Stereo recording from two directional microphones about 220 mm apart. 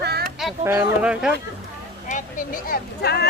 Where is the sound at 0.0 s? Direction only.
45° right (ahead or behind).